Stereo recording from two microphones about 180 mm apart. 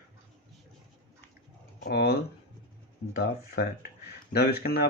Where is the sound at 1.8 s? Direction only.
60° left (ahead or behind).